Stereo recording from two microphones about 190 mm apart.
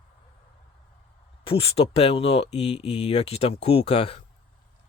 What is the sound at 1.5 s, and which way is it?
Speech, 30° left (ahead or behind).